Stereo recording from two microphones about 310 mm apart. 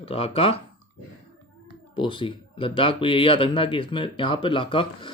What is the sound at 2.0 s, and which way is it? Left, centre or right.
Speech, centre.